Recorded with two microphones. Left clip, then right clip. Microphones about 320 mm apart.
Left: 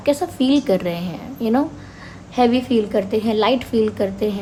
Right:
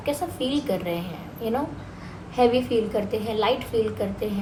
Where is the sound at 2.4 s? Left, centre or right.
Left.